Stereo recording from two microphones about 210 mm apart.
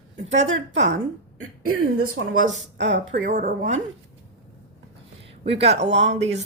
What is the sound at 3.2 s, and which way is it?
Speech, 40° right (ahead or behind).